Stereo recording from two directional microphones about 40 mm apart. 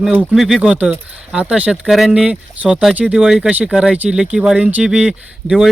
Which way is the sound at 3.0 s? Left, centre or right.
Right.